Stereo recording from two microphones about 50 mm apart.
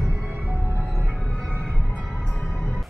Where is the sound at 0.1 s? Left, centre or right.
Right.